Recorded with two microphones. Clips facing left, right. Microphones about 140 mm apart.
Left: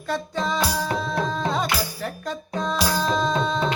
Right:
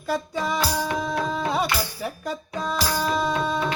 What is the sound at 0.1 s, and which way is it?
Music, 10° right (ahead or behind).